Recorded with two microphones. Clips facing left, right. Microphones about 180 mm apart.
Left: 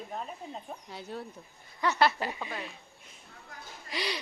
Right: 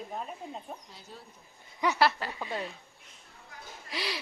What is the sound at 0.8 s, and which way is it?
Speech, 65° left (ahead or behind).